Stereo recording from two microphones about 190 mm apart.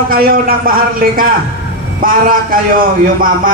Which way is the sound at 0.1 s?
50° right (ahead or behind).